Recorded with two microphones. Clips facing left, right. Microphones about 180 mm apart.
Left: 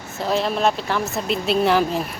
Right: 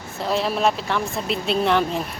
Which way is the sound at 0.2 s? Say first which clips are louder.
Left 1 dB; centre (ahead or behind).